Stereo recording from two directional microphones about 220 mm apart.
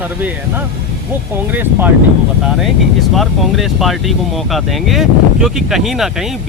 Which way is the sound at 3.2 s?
Centre (ahead or behind).